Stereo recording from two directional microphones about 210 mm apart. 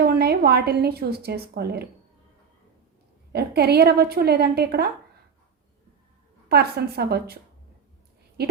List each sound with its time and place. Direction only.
0.0 s a woman's voice: 50° right (ahead or behind)
3.3 s a woman's voice: 50° right (ahead or behind)
6.5 s a woman's voice: 50° right (ahead or behind)